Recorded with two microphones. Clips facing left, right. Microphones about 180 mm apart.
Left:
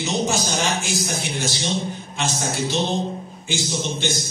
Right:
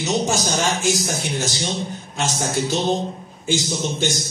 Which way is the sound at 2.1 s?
45° right (ahead or behind).